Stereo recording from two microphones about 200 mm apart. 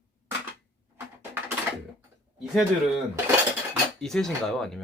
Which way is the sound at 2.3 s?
Centre (ahead or behind).